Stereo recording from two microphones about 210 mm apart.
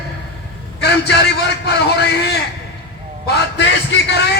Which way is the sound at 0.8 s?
55° left (ahead or behind).